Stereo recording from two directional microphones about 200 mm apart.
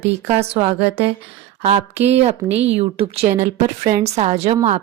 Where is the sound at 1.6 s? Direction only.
30° right (ahead or behind).